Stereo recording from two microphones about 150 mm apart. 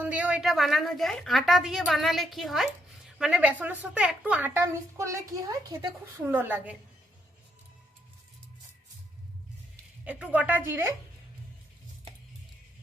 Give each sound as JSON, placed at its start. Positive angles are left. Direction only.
{"t": 0.0, "sound": "a woman's voice", "side_deg": -10}
{"t": 6.2, "sound": "a woman's voice", "side_deg": -10}
{"t": 10.0, "sound": "a woman's voice", "side_deg": -10}